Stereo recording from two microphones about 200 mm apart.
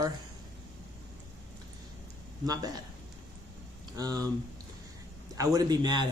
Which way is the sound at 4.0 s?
20° right (ahead or behind).